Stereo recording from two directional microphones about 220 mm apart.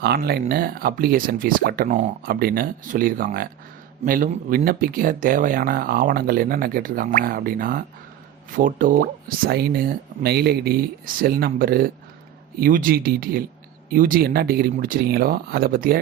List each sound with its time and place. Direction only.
0.0 s speech: 45° right (ahead or behind)